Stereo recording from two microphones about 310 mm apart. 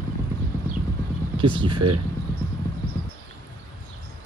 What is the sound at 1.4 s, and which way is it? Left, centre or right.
Speech, centre.